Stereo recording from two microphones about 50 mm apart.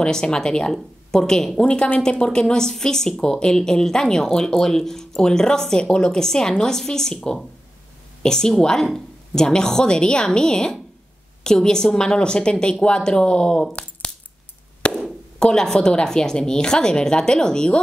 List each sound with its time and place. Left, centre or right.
0.0 s speech: centre
14.8 s a sound: left
15.3 s speech: centre